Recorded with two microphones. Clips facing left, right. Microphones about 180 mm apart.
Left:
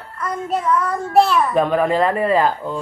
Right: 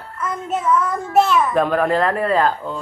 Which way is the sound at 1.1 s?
35° left (ahead or behind).